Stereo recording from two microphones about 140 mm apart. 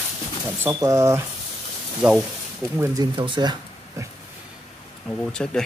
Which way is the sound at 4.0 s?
20° right (ahead or behind).